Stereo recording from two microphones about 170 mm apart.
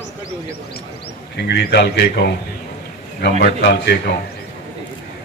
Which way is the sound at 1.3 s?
80° left.